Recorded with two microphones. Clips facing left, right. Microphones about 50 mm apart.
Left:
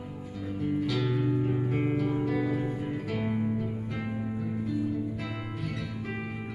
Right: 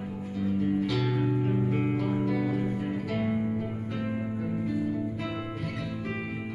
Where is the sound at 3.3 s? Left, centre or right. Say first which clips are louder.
Right 1 dB; centre.